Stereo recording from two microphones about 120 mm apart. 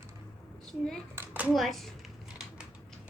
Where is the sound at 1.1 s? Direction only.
15° right (ahead or behind).